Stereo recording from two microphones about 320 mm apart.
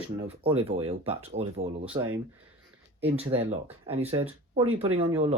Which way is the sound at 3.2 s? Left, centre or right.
Centre.